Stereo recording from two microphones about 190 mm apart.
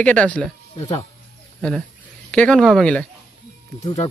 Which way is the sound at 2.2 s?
5° left (ahead or behind).